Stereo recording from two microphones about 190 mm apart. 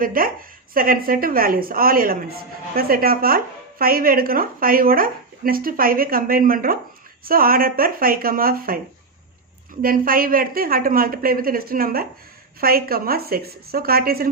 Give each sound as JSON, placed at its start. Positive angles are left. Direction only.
{"t": 0.0, "sound": "speech", "side_deg": -50}
{"t": 9.8, "sound": "speech", "side_deg": -50}